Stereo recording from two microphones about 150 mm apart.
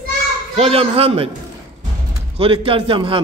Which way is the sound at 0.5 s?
40° right (ahead or behind).